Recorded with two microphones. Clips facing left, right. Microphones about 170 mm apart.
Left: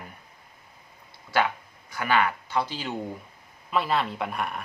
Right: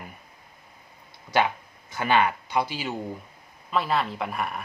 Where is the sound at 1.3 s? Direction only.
20° right (ahead or behind).